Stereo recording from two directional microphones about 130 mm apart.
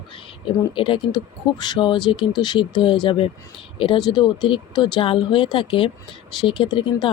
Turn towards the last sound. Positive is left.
turn(degrees=40)  # may be behind; listen again after turning